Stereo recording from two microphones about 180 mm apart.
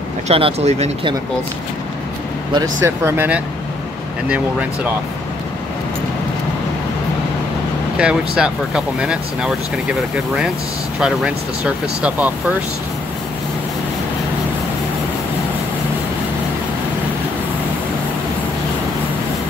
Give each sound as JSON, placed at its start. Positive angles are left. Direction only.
{"t": 0.3, "sound": "speech", "side_deg": -35}
{"t": 2.5, "sound": "speech", "side_deg": -15}
{"t": 8.0, "sound": "speech", "side_deg": -5}
{"t": 11.0, "sound": "speech", "side_deg": -5}